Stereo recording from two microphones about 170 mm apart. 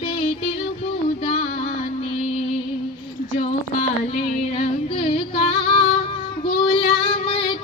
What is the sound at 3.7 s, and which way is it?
Female singing, 35° left (ahead or behind).